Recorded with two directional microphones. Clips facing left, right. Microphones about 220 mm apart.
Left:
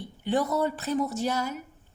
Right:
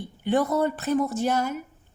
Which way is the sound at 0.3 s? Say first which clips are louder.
Right 3 dB; 55° right (ahead or behind).